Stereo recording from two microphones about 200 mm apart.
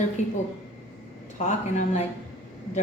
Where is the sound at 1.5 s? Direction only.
35° left (ahead or behind).